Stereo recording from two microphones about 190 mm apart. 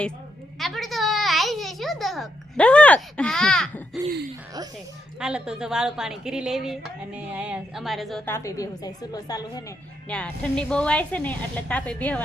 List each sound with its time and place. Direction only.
0.6 s a sound: centre (ahead or behind)
5.2 s a woman's voice: 5° right (ahead or behind)
8.3 s a woman's voice: 15° left (ahead or behind)
10.1 s a woman's voice: 5° left (ahead or behind)